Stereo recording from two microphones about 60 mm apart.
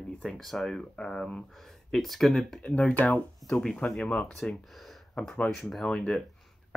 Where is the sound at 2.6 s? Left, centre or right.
Centre.